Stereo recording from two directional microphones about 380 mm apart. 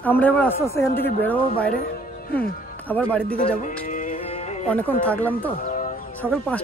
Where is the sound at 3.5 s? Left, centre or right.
Centre.